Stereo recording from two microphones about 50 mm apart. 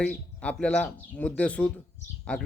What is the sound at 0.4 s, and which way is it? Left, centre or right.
Speech, left.